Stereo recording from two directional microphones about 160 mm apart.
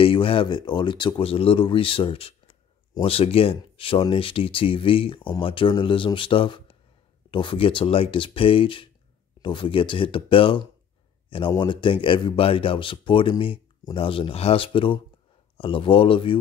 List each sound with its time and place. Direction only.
0.0 s speech: 35° left (ahead or behind)